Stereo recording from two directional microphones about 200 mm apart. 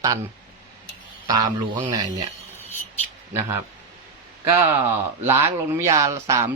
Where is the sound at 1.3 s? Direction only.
20° right (ahead or behind).